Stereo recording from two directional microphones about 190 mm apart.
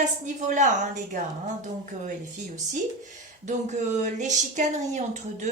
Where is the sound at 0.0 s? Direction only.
40° right (ahead or behind).